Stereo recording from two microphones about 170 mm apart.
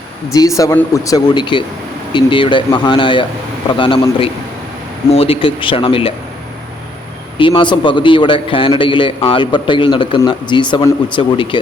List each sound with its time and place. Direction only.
0.3 s a man's voice: 20° left (ahead or behind)
7.3 s a man's voice: 30° left (ahead or behind)